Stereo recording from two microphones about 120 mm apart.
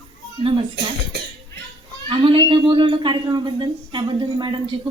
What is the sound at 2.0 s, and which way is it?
A man's voice, 45° right (ahead or behind).